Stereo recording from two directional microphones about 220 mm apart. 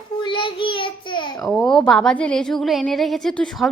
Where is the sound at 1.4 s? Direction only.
5° left (ahead or behind).